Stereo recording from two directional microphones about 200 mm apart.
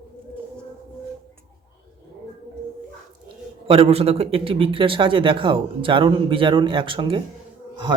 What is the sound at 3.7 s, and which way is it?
Speech, 30° right (ahead or behind).